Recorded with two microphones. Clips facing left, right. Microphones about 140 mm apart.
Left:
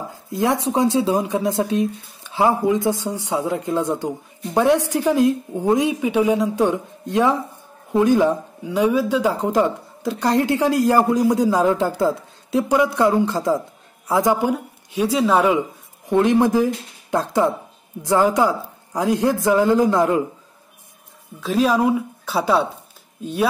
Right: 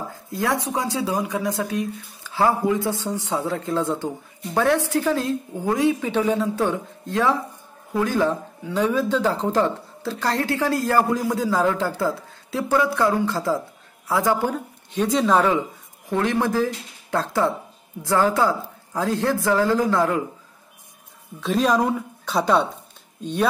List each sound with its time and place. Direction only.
0.1 s speech: 20° left (ahead or behind)
21.4 s speech: centre (ahead or behind)